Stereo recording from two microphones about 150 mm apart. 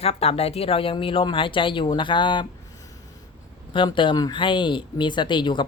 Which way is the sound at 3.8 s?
35° left (ahead or behind).